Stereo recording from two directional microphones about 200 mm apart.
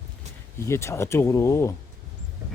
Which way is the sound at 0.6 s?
15° left (ahead or behind).